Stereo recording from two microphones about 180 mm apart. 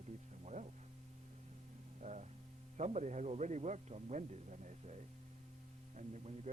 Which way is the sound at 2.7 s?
40° right (ahead or behind).